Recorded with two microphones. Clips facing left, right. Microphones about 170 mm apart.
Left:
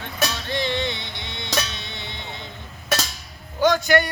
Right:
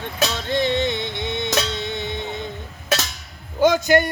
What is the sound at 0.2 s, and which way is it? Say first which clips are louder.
Music: right 4 dB; 20° right (ahead or behind).